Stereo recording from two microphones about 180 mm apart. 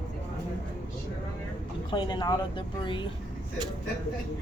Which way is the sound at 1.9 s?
25° left (ahead or behind).